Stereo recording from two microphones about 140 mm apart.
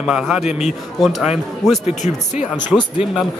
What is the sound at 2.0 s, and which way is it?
Speech, 60° left (ahead or behind).